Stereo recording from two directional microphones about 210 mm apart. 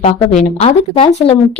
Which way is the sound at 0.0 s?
30° left (ahead or behind).